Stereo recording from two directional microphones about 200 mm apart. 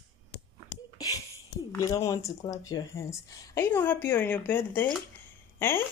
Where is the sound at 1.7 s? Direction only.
15° left (ahead or behind).